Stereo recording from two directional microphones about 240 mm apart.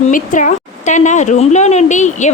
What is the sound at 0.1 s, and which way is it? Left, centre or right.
A woman's voice, left.